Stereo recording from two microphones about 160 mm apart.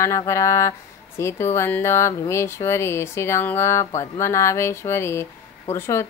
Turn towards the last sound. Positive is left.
turn(degrees=15)  # may be behind; listen again after turning